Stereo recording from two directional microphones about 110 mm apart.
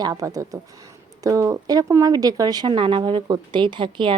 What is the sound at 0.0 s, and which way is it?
Speech, 35° right (ahead or behind).